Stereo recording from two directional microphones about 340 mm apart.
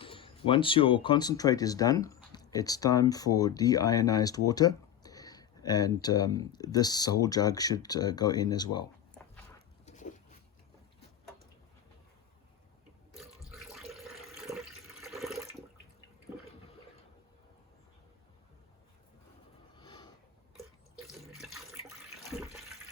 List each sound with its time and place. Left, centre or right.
0.0 s speech: centre
9.8 s a sound: left
13.1 s water: centre
19.7 s snort: centre
21.1 s water: centre